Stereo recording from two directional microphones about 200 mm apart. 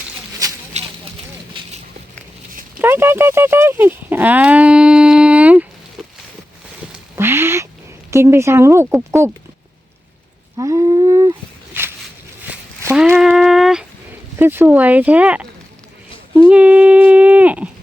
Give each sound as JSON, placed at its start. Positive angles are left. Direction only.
{"t": 0.7, "sound": "a sound", "side_deg": -35}
{"t": 2.7, "sound": "speech", "side_deg": -10}
{"t": 7.2, "sound": "cat", "side_deg": -10}
{"t": 8.1, "sound": "speech", "side_deg": -15}
{"t": 10.6, "sound": "a sound", "side_deg": -15}
{"t": 14.3, "sound": "speech", "side_deg": -10}
{"t": 16.5, "sound": "speech", "side_deg": -5}